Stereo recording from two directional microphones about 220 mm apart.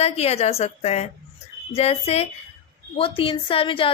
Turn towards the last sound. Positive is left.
turn(degrees=25)  # may be behind; listen again after turning